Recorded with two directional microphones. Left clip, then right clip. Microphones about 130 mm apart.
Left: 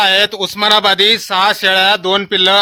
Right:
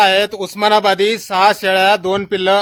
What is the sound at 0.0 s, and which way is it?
Speech, centre (ahead or behind).